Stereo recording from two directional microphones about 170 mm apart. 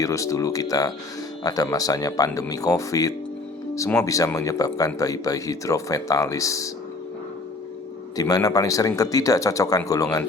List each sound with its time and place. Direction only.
0.0 s speech: 20° left (ahead or behind)
8.1 s speech: 20° left (ahead or behind)